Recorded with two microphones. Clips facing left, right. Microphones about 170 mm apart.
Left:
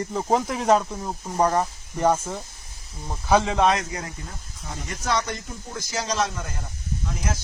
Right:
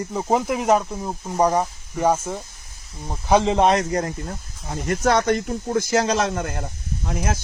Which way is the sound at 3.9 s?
50° right (ahead or behind).